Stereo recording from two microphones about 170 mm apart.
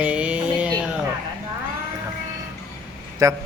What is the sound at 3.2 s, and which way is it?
Speech, 20° right (ahead or behind).